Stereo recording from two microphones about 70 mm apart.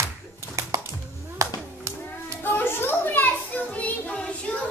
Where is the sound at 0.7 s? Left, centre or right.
Right.